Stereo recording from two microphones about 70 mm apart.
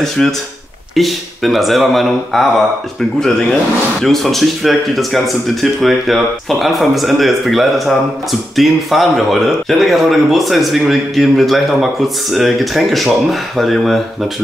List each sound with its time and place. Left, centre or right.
0.2 s speech: centre
0.9 s speech: centre
4.0 s speech: centre